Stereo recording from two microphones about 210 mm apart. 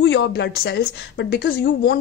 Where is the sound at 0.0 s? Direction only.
60° left (ahead or behind).